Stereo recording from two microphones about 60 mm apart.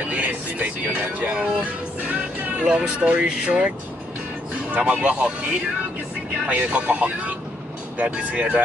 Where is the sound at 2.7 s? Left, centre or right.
Centre.